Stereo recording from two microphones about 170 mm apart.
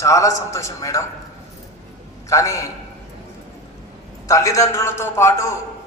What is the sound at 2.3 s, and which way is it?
Speech, 20° left (ahead or behind).